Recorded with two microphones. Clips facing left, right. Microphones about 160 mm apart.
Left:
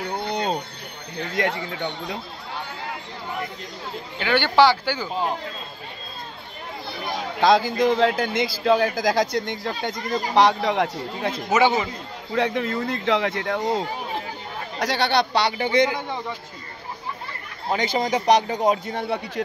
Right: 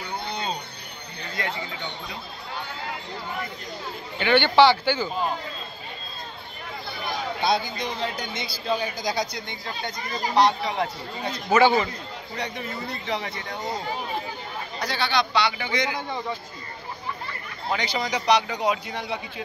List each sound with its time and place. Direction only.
0.0 s a sound: 65° left (ahead or behind)
1.3 s speech: 65° left (ahead or behind)
4.2 s speech: 5° left (ahead or behind)
7.3 s speech: 90° left; by 11.3 s 70° left (ahead or behind)
11.5 s speech: 15° left (ahead or behind)
12.4 s speech: 90° left
14.8 s speech: 70° left (ahead or behind)
15.3 s speech: 40° left (ahead or behind)
15.6 s a man's voice: 30° left (ahead or behind)
17.6 s a man's voice: 45° left (ahead or behind)